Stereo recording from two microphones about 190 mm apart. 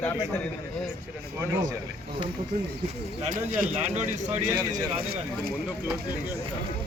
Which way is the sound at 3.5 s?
45° right (ahead or behind).